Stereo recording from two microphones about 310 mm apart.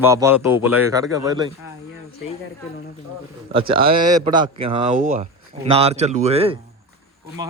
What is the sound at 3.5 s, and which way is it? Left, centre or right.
Speech, centre.